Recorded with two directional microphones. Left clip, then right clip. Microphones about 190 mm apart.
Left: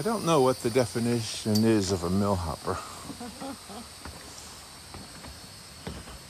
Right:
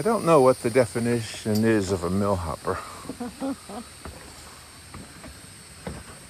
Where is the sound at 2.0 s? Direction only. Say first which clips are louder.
Right 3 dB; 5° left (ahead or behind).